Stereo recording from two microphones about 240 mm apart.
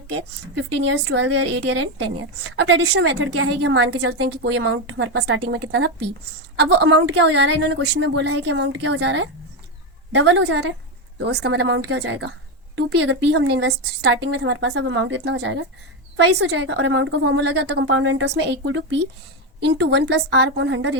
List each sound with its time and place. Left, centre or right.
0.1 s a woman's voice: right